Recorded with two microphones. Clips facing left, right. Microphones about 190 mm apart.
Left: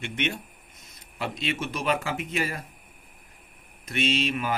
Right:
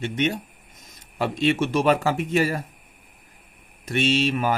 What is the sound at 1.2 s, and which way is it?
Speech, 45° right (ahead or behind).